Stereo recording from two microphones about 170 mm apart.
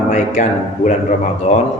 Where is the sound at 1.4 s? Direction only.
40° left (ahead or behind).